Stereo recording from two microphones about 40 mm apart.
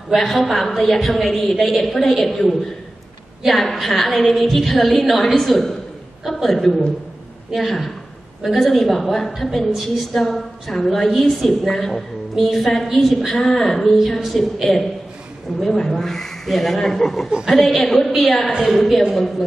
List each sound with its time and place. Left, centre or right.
0.2 s a woman's voice: centre